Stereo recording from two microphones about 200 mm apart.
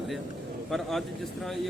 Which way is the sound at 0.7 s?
Centre (ahead or behind).